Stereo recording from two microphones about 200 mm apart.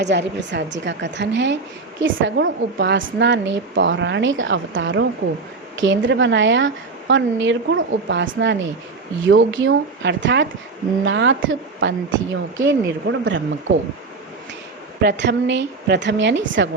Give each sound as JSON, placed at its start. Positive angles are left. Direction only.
{"t": 0.0, "sound": "a woman's voice", "side_deg": -60}
{"t": 15.0, "sound": "a woman's voice", "side_deg": -60}